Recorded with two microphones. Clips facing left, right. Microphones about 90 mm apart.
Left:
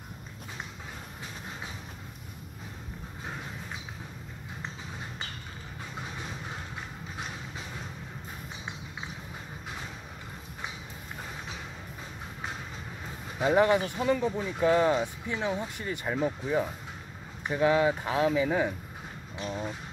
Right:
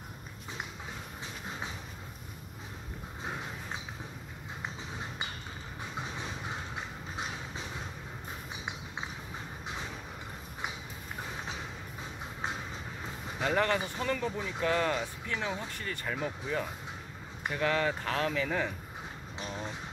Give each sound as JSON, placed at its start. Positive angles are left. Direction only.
{"t": 13.4, "sound": "speech", "side_deg": 15}